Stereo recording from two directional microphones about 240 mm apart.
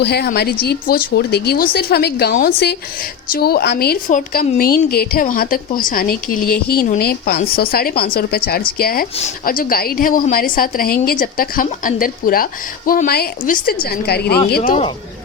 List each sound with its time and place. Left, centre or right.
0.0 s a woman's voice: left